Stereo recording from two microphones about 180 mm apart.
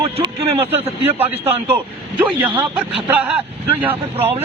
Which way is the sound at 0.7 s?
10° right (ahead or behind).